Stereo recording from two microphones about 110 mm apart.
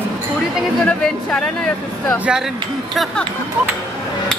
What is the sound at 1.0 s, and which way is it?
Speech, 10° left (ahead or behind).